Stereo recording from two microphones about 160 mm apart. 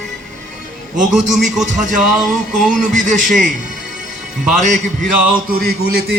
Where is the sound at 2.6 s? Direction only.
55° right (ahead or behind).